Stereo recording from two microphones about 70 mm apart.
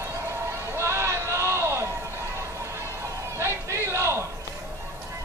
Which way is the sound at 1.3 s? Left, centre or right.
Right.